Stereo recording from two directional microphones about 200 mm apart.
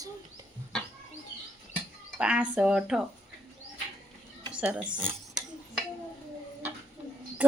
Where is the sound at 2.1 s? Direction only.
5° right (ahead or behind).